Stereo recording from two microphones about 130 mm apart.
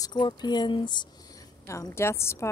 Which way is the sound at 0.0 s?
35° left (ahead or behind).